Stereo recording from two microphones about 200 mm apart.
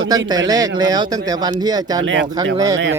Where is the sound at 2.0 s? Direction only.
65° right (ahead or behind).